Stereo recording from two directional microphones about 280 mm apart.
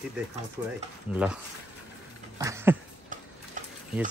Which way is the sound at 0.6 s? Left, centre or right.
Centre.